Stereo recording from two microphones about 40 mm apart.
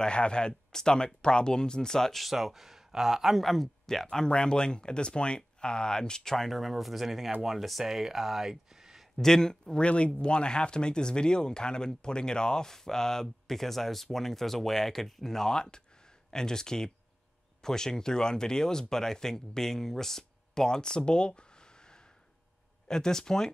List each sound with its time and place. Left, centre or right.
0.0 s speech: left
2.2 s speech: centre
3.3 s speech: centre
4.3 s speech: left
6.3 s speech: centre
9.2 s speech: centre
9.8 s speech: left
22.8 s speech: centre